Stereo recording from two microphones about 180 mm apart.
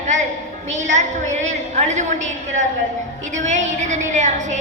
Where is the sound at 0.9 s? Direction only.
40° right (ahead or behind).